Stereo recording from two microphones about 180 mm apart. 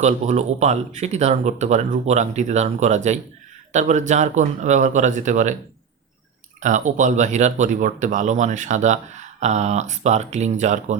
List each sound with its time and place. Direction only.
0.0 s speech: 40° right (ahead or behind)
6.6 s speech: 45° right (ahead or behind)